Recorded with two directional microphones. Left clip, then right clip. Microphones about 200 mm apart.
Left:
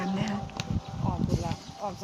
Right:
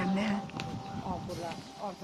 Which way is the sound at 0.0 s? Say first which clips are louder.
Even; 5° right (ahead or behind).